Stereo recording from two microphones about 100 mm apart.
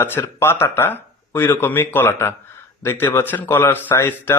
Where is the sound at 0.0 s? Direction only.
25° left (ahead or behind).